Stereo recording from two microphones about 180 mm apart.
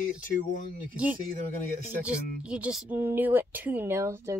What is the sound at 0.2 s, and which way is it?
Speech, 50° left (ahead or behind).